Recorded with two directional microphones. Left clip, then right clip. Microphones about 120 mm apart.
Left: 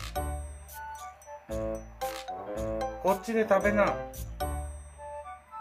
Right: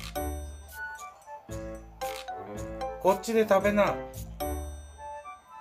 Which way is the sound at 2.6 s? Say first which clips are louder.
Right 1 dB; centre (ahead or behind).